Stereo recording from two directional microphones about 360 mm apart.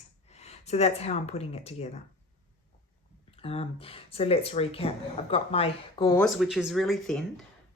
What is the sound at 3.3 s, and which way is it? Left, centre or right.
Speech, centre.